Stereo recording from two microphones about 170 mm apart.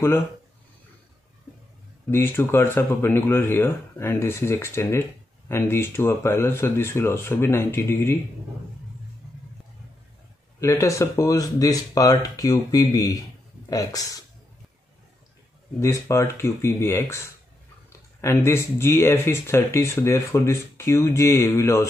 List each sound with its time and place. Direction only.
2.0 s speech: 15° left (ahead or behind)
10.6 s speech: 15° left (ahead or behind)
15.8 s speech: 15° left (ahead or behind)
18.2 s speech: 15° left (ahead or behind)